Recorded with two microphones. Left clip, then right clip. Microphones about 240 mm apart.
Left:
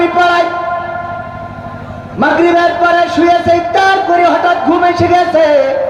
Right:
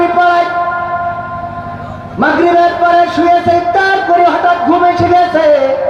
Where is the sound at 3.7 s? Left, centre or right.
Left.